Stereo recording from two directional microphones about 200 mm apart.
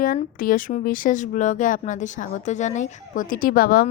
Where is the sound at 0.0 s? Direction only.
40° left (ahead or behind).